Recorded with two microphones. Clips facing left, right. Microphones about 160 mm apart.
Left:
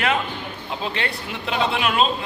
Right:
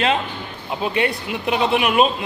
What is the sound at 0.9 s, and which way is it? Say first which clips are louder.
A man's voice: right 7 dB; 15° right (ahead or behind).